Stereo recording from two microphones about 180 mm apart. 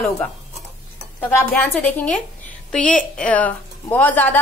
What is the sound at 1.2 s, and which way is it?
A woman's voice, 10° left (ahead or behind).